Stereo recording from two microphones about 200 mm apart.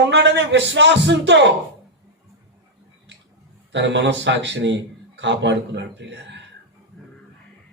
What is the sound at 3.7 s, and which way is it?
A man's voice, 60° right (ahead or behind).